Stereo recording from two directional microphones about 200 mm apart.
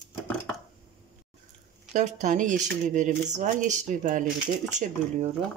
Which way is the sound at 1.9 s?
35° right (ahead or behind).